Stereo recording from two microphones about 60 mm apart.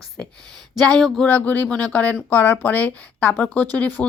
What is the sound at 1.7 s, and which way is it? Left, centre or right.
Speech, left.